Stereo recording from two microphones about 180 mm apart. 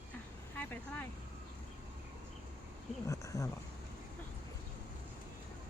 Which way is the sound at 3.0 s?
15° left (ahead or behind).